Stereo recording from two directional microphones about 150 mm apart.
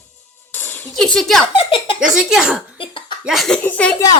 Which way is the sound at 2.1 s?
5° right (ahead or behind).